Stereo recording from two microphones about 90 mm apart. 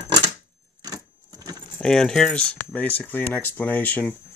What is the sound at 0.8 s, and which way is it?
Keys jangling, 50° right (ahead or behind).